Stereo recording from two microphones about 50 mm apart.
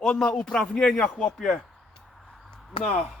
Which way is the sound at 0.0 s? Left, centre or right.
Centre.